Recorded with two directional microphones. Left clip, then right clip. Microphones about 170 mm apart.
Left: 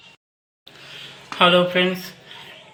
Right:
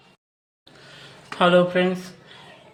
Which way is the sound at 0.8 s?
25° right (ahead or behind).